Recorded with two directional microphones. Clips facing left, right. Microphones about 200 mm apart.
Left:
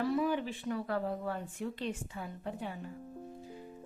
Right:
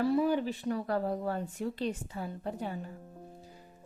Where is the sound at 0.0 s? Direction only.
35° right (ahead or behind).